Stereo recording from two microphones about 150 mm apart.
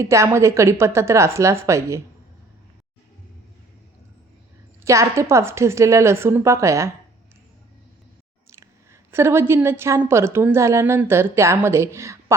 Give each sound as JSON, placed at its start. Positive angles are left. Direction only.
{"t": 0.0, "sound": "a woman's voice", "side_deg": -20}
{"t": 4.9, "sound": "a woman's voice", "side_deg": -20}
{"t": 8.5, "sound": "a woman's voice", "side_deg": -15}